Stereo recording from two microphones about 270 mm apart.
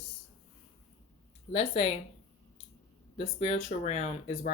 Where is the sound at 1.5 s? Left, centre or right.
Left.